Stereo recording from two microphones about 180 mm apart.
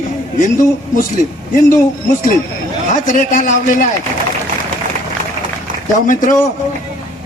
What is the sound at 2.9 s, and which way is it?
Speech, 45° left (ahead or behind).